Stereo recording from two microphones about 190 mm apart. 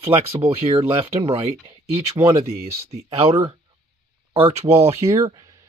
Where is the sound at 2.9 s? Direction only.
30° right (ahead or behind).